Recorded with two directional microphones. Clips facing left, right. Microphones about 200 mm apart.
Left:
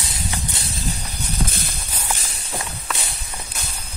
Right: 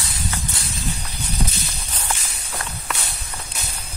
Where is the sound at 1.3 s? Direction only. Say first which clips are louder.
Even; 50° left (ahead or behind).